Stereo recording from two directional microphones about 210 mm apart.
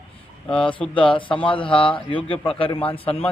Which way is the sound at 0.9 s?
25° left (ahead or behind).